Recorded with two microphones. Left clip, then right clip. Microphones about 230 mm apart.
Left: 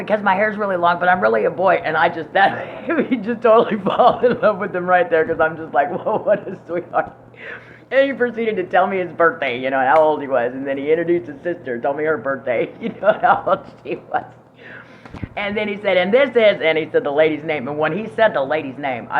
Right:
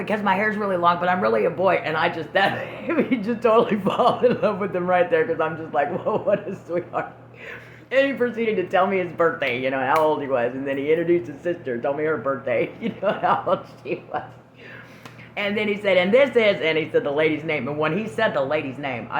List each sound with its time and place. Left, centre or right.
0.0 s speech: right
15.4 s speech: right